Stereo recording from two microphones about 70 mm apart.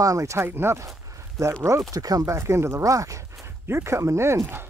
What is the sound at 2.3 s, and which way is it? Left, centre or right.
Speech, right.